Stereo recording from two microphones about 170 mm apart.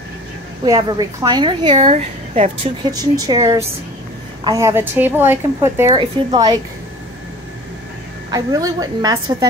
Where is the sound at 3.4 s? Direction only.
35° right (ahead or behind).